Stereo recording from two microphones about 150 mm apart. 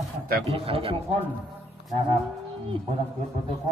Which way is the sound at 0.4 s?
40° right (ahead or behind).